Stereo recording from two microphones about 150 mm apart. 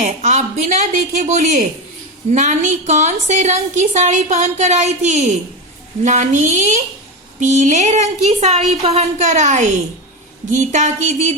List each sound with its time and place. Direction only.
0.0 s a woman's voice: 50° right (ahead or behind)